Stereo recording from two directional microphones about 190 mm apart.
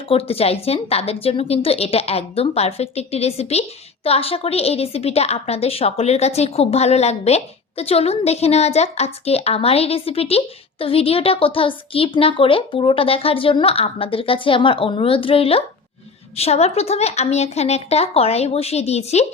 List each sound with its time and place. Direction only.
0.1 s a woman's voice: 30° left (ahead or behind)